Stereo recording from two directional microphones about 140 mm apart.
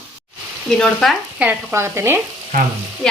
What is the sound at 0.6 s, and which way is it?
Speech, 5° left (ahead or behind).